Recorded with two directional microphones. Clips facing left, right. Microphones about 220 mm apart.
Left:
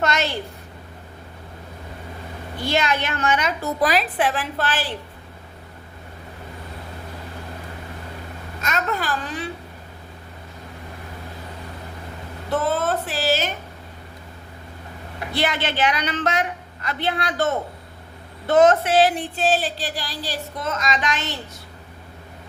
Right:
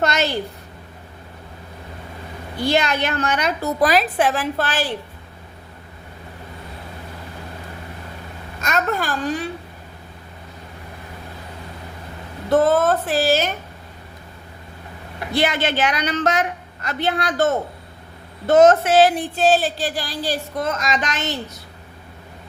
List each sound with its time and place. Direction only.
0.0 s a woman's voice: 40° right (ahead or behind)
2.6 s a woman's voice: 40° right (ahead or behind)
8.6 s speech: 45° right (ahead or behind)
12.5 s a woman's voice: 45° right (ahead or behind)
15.3 s speech: 45° right (ahead or behind)